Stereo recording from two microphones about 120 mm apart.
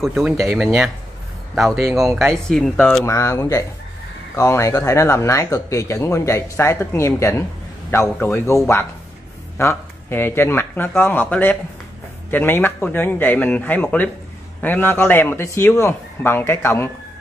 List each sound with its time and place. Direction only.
0.6 s speech: centre (ahead or behind)
1.8 s speech: 25° right (ahead or behind)
2.5 s speech: 5° left (ahead or behind)
3.1 s speech: 25° left (ahead or behind)